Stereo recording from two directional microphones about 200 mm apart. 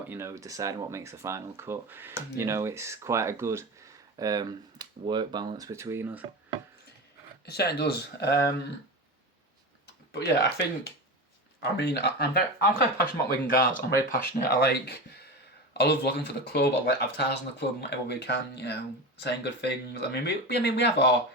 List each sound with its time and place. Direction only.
0.1 s speech: 15° right (ahead or behind)
7.4 s speech: 55° left (ahead or behind)
9.8 s speech: 55° left (ahead or behind)